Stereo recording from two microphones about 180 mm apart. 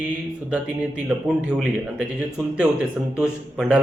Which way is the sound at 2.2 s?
5° right (ahead or behind).